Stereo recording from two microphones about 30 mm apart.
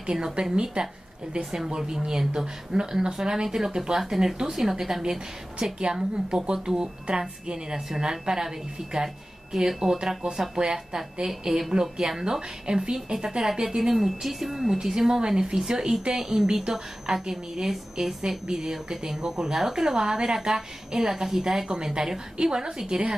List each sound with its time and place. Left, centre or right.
0.1 s a woman's voice: right
1.4 s speech: centre
1.8 s a woman's voice: right
5.6 s a woman's voice: right